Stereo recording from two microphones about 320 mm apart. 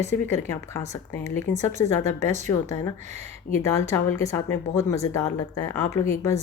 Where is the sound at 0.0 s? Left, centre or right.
Centre.